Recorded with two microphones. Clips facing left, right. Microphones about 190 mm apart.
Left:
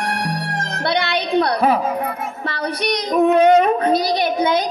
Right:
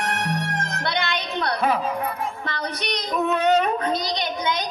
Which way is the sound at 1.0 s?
15° left (ahead or behind).